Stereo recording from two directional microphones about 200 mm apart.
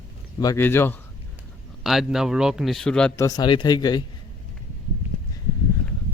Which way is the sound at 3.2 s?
20° left (ahead or behind).